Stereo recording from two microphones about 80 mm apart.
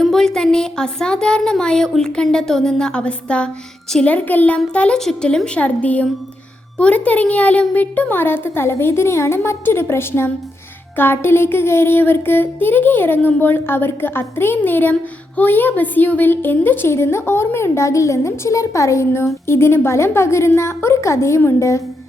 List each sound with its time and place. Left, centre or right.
0.0 s speech: centre
6.7 s a sound: centre
15.4 s a woman's voice: left